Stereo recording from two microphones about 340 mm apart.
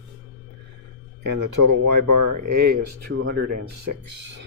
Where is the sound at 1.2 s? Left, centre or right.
Right.